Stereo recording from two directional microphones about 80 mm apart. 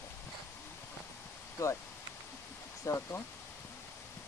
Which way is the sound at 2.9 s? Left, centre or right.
Left.